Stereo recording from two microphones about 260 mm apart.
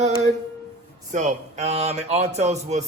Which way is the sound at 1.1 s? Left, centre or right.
Right.